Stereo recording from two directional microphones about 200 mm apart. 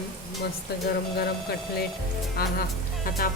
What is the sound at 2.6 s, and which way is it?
Speech, 45° left (ahead or behind).